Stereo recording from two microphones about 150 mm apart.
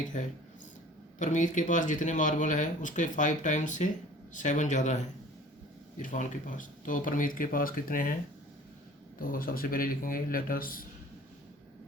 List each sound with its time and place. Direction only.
0.1 s speech: 55° left (ahead or behind)
6.0 s speech: 60° left (ahead or behind)
9.1 s a man's voice: 70° left (ahead or behind)